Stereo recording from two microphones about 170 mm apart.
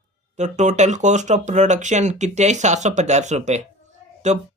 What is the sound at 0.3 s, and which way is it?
Speech, 45° right (ahead or behind).